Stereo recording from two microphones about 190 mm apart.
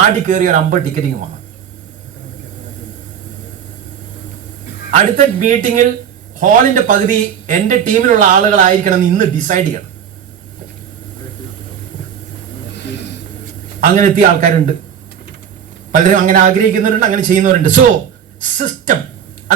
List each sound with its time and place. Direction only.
0.0 s a man's voice: 40° right (ahead or behind)
4.9 s a man's voice: 40° right (ahead or behind)
13.8 s a man's voice: 40° right (ahead or behind)
16.0 s a man's voice: 40° right (ahead or behind)